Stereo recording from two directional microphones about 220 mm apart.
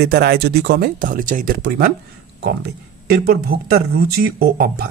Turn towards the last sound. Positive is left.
turn(degrees=-45)  # may be behind; listen again after turning